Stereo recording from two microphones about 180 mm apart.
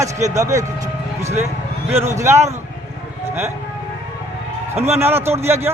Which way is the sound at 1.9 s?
15° right (ahead or behind).